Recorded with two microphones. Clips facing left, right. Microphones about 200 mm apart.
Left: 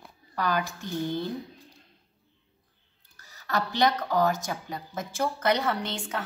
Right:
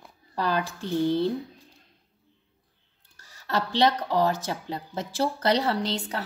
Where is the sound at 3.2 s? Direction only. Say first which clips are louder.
Right 1 dB; 30° right (ahead or behind).